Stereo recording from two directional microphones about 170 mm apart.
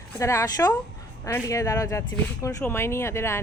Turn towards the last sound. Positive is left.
turn(degrees=15)  # may be behind; listen again after turning